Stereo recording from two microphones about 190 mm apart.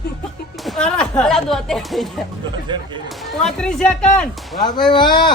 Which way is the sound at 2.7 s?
25° right (ahead or behind).